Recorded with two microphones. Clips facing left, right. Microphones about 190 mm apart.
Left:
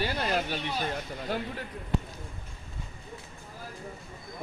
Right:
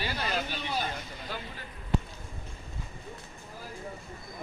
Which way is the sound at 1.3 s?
60° left (ahead or behind).